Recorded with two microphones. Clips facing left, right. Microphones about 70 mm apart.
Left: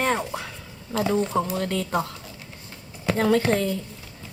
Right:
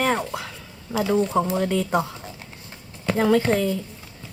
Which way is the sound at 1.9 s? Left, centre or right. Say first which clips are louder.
Right 3 dB; centre.